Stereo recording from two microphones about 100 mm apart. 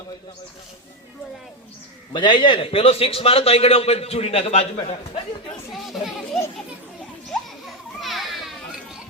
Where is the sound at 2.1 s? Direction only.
50° left (ahead or behind); by 5.2 s 75° left (ahead or behind).